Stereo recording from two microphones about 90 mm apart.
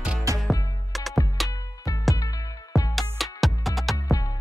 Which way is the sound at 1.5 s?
40° left (ahead or behind).